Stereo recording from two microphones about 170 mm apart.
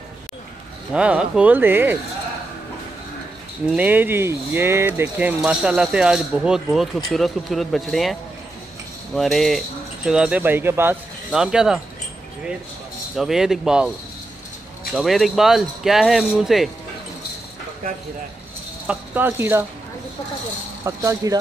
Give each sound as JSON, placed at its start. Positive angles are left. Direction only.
{"t": 0.9, "sound": "speech", "side_deg": -5}
{"t": 3.7, "sound": "speech", "side_deg": -10}
{"t": 11.3, "sound": "speech", "side_deg": -5}
{"t": 13.1, "sound": "speech", "side_deg": 0}
{"t": 15.0, "sound": "speech", "side_deg": 0}
{"t": 18.9, "sound": "speech", "side_deg": -10}
{"t": 20.8, "sound": "speech", "side_deg": -20}